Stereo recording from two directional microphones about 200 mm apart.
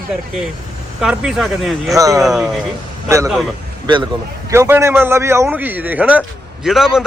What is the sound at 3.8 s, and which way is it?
A man's voice, 25° right (ahead or behind).